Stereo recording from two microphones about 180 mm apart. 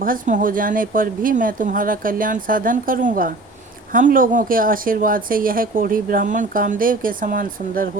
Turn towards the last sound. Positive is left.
turn(degrees=-50)  # may be behind; listen again after turning